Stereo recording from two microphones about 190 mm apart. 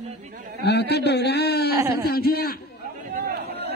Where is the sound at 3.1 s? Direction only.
60° right (ahead or behind).